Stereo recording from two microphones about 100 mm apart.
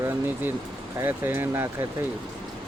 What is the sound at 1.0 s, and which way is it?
Speech, 20° right (ahead or behind).